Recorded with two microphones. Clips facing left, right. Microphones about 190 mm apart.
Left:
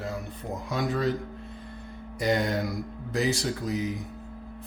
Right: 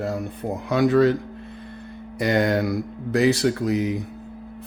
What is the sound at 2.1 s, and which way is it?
Mantra, 65° right (ahead or behind).